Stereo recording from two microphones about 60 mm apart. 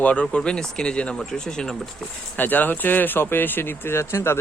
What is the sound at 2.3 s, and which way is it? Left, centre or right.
Speech, left.